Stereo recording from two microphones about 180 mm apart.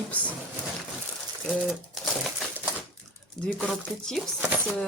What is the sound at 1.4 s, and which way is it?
Typewriter, centre (ahead or behind).